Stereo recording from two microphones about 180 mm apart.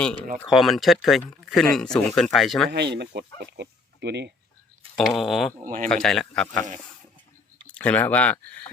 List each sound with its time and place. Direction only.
0.5 s speech: centre (ahead or behind)
2.6 s speech: 70° right (ahead or behind)
4.9 s speech: centre (ahead or behind)
5.6 s speech: 50° right (ahead or behind)
5.9 s speech: 5° left (ahead or behind)
7.7 s speech: 10° left (ahead or behind)